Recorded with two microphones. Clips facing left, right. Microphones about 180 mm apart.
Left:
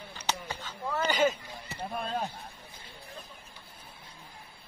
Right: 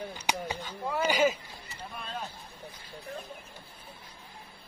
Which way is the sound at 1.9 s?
45° left (ahead or behind).